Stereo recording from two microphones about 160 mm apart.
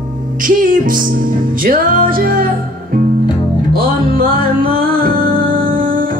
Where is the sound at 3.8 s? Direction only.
65° right (ahead or behind).